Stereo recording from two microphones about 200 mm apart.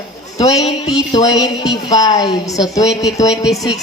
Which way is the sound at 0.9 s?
20° left (ahead or behind).